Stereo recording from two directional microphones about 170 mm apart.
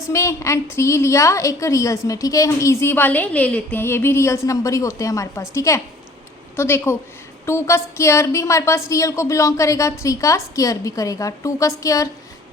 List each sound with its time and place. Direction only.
0.1 s a woman's voice: 15° left (ahead or behind)